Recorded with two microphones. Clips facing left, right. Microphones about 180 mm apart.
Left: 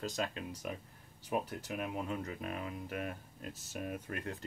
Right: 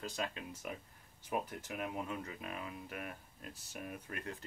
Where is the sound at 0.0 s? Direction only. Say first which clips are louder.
Left 3 dB; 40° left (ahead or behind).